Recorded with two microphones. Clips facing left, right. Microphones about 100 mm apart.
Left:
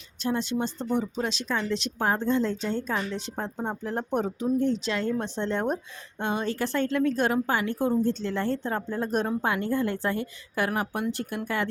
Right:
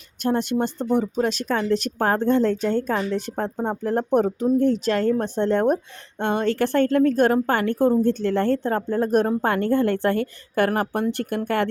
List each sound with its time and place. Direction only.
0.2 s a woman's voice: 55° right (ahead or behind)